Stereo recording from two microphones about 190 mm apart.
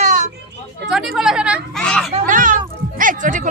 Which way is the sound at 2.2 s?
45° right (ahead or behind).